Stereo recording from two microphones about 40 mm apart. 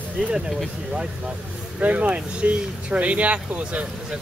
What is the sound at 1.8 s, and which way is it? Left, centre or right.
Speech, right.